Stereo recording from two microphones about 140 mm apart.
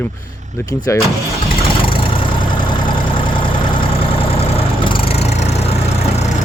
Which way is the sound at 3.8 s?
40° left (ahead or behind).